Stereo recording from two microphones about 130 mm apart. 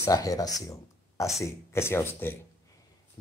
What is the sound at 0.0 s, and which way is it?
Speech, 25° left (ahead or behind).